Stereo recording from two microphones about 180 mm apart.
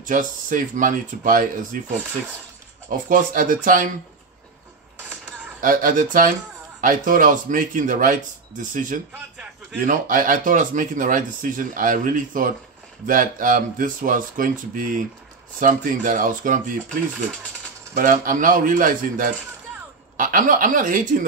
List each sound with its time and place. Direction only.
0.0 s speech: 50° right (ahead or behind)
2.9 s speech: 50° right (ahead or behind)
5.6 s speech: 50° right (ahead or behind)
17.9 s speech: 45° right (ahead or behind)